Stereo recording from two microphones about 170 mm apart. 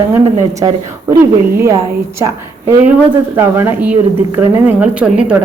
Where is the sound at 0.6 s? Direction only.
20° right (ahead or behind).